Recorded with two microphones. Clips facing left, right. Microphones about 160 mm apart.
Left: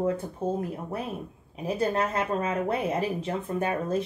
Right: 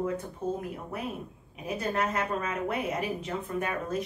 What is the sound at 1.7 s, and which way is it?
A woman's voice, 30° left (ahead or behind).